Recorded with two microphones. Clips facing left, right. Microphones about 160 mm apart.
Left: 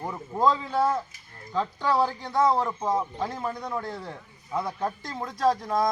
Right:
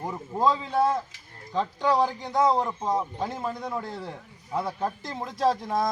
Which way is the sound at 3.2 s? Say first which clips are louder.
Even; centre (ahead or behind).